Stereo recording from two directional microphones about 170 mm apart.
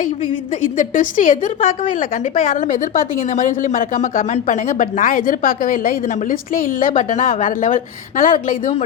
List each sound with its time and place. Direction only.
0.8 s a woman's voice: 50° left (ahead or behind)